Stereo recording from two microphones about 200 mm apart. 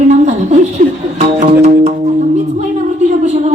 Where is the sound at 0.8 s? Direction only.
40° right (ahead or behind).